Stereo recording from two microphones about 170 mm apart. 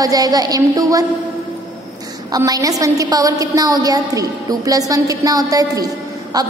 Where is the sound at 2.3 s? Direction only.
20° right (ahead or behind).